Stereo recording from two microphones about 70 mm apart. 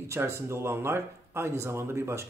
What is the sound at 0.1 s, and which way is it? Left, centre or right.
Speech, right.